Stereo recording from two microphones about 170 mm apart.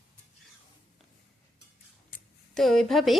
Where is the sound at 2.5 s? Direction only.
Centre (ahead or behind).